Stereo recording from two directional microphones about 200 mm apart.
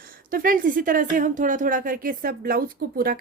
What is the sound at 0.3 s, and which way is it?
A woman's voice, 45° right (ahead or behind).